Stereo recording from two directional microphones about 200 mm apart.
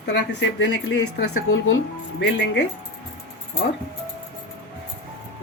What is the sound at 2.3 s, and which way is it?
Speech, 60° left (ahead or behind).